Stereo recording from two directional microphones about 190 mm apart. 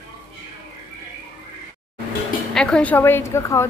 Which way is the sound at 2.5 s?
5° left (ahead or behind).